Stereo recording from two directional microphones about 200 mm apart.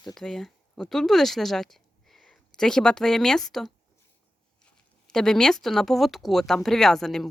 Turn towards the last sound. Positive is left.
turn(degrees=0)  # may be behind; listen again after turning